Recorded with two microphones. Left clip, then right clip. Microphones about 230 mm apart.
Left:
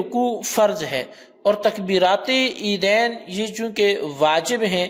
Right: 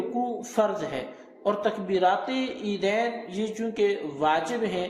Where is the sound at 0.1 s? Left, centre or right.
Left.